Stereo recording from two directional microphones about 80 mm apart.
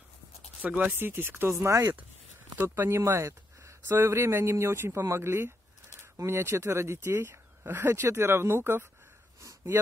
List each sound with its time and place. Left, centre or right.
0.6 s speech: centre